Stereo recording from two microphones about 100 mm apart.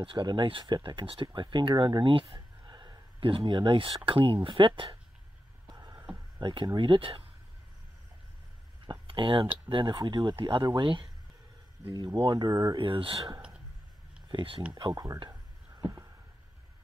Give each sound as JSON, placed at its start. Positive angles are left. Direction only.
{"t": 0.0, "sound": "speech", "side_deg": -55}
{"t": 2.7, "sound": "a sound", "side_deg": -40}
{"t": 3.2, "sound": "speech", "side_deg": -60}
{"t": 5.7, "sound": "a sound", "side_deg": -40}
{"t": 6.4, "sound": "speech", "side_deg": -50}
{"t": 9.0, "sound": "speech", "side_deg": -60}
{"t": 12.2, "sound": "speech", "side_deg": -45}
{"t": 12.7, "sound": "speech", "side_deg": -60}
{"t": 14.3, "sound": "speech", "side_deg": -60}
{"t": 14.7, "sound": "speech", "side_deg": -45}
{"t": 15.2, "sound": "a sound", "side_deg": -35}